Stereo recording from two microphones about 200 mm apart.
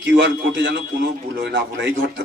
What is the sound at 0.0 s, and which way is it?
A man's voice, 65° right (ahead or behind).